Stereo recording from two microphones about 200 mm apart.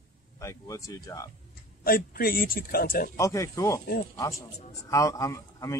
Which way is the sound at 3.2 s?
15° left (ahead or behind).